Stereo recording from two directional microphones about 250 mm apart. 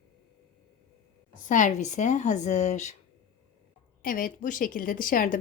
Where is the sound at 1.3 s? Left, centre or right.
Left.